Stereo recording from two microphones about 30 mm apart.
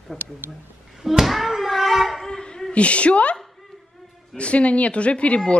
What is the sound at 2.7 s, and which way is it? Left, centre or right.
Speech, left.